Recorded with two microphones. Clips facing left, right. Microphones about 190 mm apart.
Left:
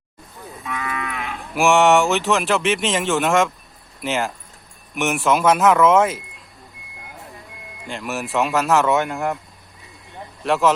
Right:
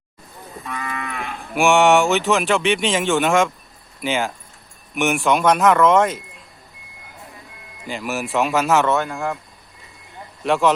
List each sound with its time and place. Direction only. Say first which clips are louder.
0.6 s moo: left 1 dB; centre (ahead or behind)
7.9 s moo: right 2 dB; centre (ahead or behind)
8.9 s speech: left 1 dB; 20° left (ahead or behind)
10.4 s moo: even; centre (ahead or behind)